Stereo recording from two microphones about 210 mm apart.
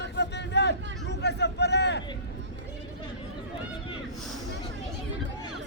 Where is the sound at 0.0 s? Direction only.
55° left (ahead or behind).